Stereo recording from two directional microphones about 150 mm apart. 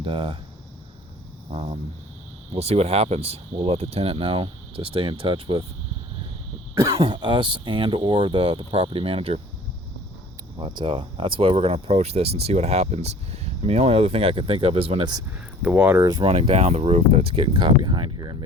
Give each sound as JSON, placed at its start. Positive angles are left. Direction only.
{"t": 0.0, "sound": "speech", "side_deg": -35}
{"t": 1.5, "sound": "speech", "side_deg": -40}
{"t": 7.0, "sound": "speech", "side_deg": -30}
{"t": 10.6, "sound": "speech", "side_deg": -35}
{"t": 15.6, "sound": "speech", "side_deg": -10}
{"t": 16.2, "sound": "speech", "side_deg": -40}